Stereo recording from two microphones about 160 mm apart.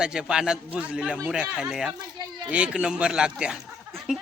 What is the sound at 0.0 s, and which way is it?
A man's voice, 5° right (ahead or behind).